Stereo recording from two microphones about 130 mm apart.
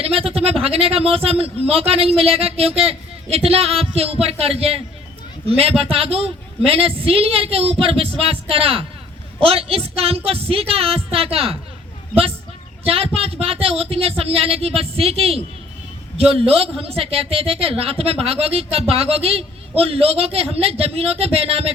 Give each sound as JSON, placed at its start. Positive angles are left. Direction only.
{"t": 0.0, "sound": "a sound", "side_deg": -50}
{"t": 0.6, "sound": "a woman's voice", "side_deg": -50}
{"t": 12.8, "sound": "a woman's voice", "side_deg": -45}